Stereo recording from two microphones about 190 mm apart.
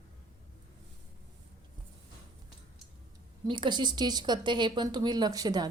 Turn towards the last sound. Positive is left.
turn(degrees=-20)  # may be behind; listen again after turning